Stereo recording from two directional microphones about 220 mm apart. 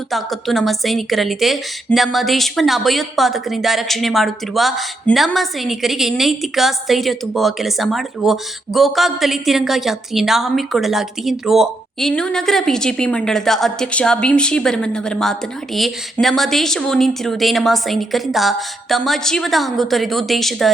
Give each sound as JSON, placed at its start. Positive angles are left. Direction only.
{"t": 0.1, "sound": "a woman's voice", "side_deg": 0}